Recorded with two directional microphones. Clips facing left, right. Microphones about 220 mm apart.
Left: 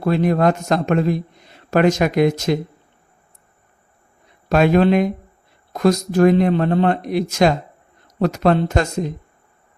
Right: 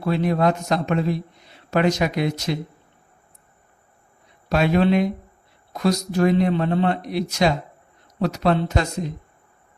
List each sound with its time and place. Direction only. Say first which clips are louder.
0.0 s a man's voice: left 4 dB; 50° left (ahead or behind)
4.4 s a man's voice: left 4 dB; 50° left (ahead or behind)